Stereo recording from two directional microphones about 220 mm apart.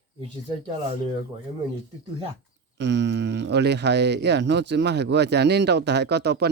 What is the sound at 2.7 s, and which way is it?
Speech, 50° right (ahead or behind).